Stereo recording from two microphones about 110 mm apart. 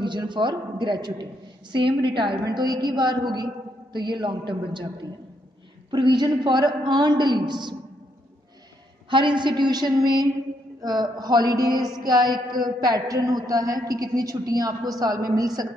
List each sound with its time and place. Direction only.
0.0 s a woman's voice: 45° right (ahead or behind)
5.9 s a woman's voice: 45° right (ahead or behind)
9.1 s a woman's voice: 45° right (ahead or behind)